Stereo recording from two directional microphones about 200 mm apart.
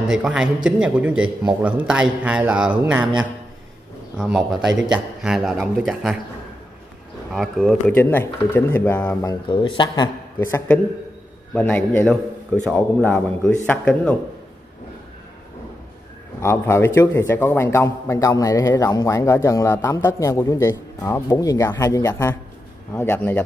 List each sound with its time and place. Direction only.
0.0 s a man's voice: 5° right (ahead or behind)
4.2 s a man's voice: centre (ahead or behind)
7.3 s a man's voice: centre (ahead or behind)
7.8 s a man's voice: 10° left (ahead or behind)
9.2 s a man's voice: 20° left (ahead or behind); by 14.1 s 5° left (ahead or behind)
16.3 s a man's voice: 15° left (ahead or behind)